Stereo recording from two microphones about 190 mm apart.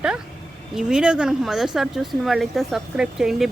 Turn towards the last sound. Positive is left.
turn(degrees=0)  # may be behind; listen again after turning